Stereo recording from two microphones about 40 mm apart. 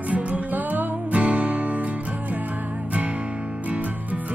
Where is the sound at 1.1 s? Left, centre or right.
Right.